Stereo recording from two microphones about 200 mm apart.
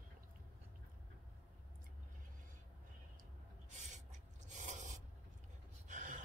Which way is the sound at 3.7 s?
35° right (ahead or behind).